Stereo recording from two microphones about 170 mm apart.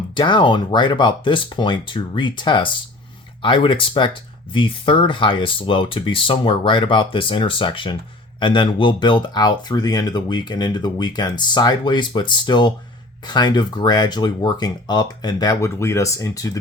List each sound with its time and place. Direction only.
0.1 s speech: 25° left (ahead or behind)